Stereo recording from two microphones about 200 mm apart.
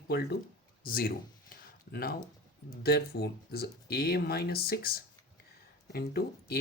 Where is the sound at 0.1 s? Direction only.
55° left (ahead or behind).